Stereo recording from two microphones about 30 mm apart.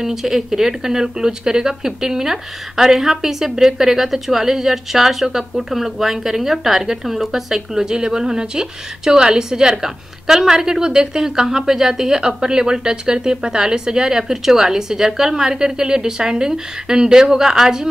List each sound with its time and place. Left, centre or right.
0.0 s a woman's voice: centre
7.7 s a woman's voice: right
12.2 s a woman's voice: right